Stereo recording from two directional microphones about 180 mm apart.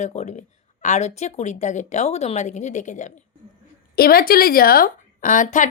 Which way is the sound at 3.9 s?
55° left (ahead or behind).